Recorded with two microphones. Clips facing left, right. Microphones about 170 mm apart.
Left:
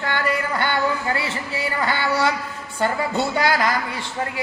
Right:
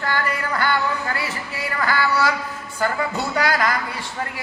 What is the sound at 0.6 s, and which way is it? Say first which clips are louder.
Speech: even; 25° left (ahead or behind).